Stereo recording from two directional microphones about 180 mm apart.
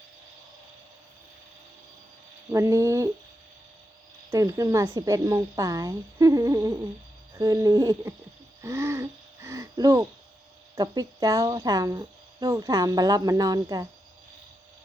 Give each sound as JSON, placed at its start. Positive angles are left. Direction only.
{"t": 2.5, "sound": "speech", "side_deg": -15}
{"t": 4.3, "sound": "speech", "side_deg": -15}
{"t": 8.6, "sound": "a sound", "side_deg": -15}
{"t": 10.8, "sound": "speech", "side_deg": -20}